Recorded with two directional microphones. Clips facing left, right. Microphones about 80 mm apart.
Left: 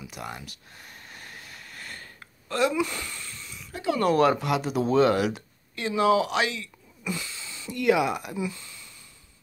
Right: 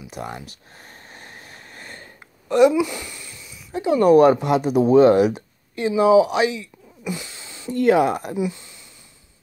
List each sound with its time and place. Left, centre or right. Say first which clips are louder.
0.1 s a sound: right 8 dB; right; by 3.6 s centre
3.7 s speech: right 9 dB; right
7.3 s speech: right 9 dB; right